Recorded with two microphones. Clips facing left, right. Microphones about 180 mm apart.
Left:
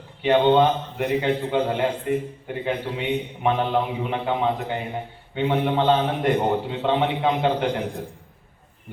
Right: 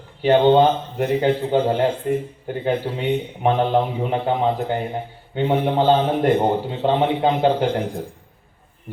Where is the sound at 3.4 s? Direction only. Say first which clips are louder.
Right 4 dB; 35° right (ahead or behind).